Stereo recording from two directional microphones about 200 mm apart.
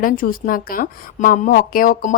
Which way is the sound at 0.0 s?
45° left (ahead or behind).